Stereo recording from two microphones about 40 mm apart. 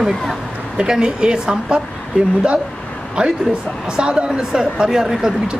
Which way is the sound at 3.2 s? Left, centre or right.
Right.